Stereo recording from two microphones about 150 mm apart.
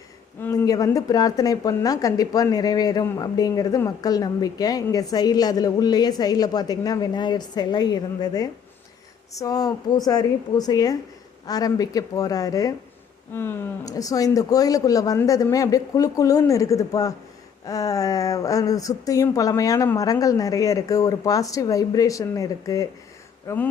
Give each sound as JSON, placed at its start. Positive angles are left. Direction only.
{"t": 0.6, "sound": "speech", "side_deg": 25}